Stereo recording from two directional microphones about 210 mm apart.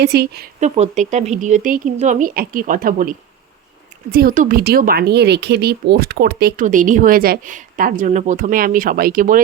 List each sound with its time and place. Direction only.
0.0 s speech: 50° right (ahead or behind)
0.6 s speech: 35° right (ahead or behind)